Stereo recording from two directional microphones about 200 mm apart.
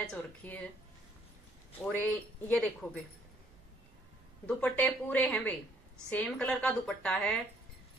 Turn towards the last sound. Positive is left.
turn(degrees=5)  # may be behind; listen again after turning